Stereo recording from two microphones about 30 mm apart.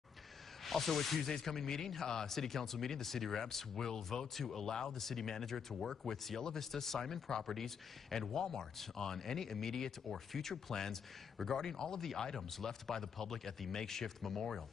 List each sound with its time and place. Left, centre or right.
0.7 s speech: centre
4.6 s speech: left
4.9 s speech: centre
12.4 s speech: centre